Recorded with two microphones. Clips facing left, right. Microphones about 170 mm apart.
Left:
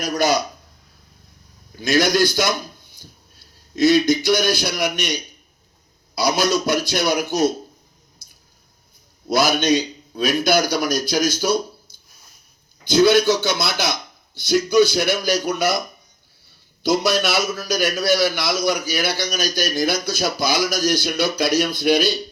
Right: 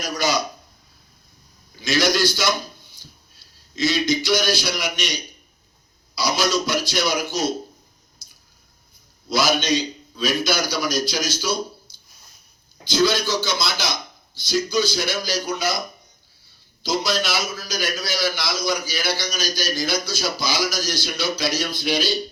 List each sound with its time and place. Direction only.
0.0 s speech: 55° left (ahead or behind)
1.7 s a man's voice: 55° left (ahead or behind)
9.3 s a man's voice: 55° left (ahead or behind)
12.9 s a man's voice: 60° left (ahead or behind)
16.8 s a man's voice: 65° left (ahead or behind)